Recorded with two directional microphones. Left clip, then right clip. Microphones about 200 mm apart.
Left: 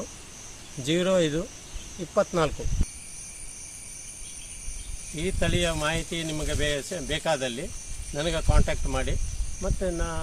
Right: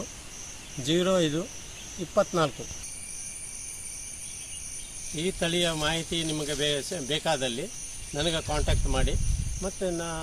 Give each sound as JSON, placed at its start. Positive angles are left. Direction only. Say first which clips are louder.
{"t": 0.9, "sound": "speech", "louder": "left 1 dB", "side_deg": 20}
{"t": 5.1, "sound": "speech", "louder": "even", "side_deg": 10}